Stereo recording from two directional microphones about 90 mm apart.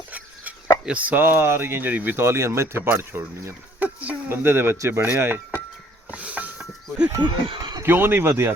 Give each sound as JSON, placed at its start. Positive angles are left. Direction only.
{"t": 0.9, "sound": "speech", "side_deg": -15}
{"t": 4.4, "sound": "speech", "side_deg": -25}
{"t": 6.1, "sound": "wild animals", "side_deg": -15}
{"t": 7.2, "sound": "speech", "side_deg": -70}
{"t": 7.8, "sound": "speech", "side_deg": -25}